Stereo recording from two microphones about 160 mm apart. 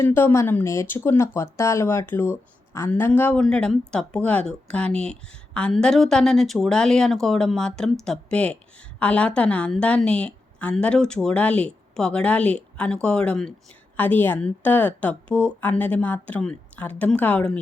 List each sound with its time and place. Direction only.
0.0 s a woman's voice: 15° left (ahead or behind)